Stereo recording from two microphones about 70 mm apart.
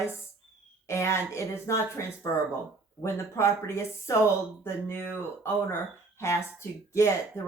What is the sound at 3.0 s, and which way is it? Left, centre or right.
Speech, left.